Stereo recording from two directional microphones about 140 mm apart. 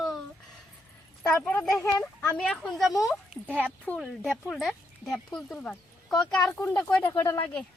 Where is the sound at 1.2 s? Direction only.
15° left (ahead or behind).